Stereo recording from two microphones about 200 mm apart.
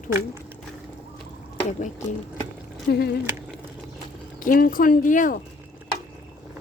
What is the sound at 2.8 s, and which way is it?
Speech, 55° left (ahead or behind).